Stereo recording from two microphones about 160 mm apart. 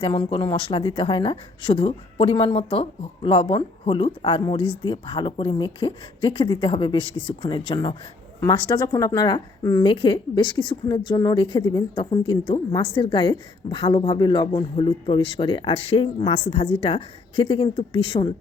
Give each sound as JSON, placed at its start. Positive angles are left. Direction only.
{"t": 0.0, "sound": "speech", "side_deg": 30}
{"t": 9.8, "sound": "speech", "side_deg": 30}